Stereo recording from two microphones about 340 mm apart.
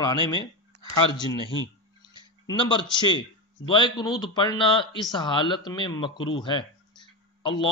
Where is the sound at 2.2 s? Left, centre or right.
Centre.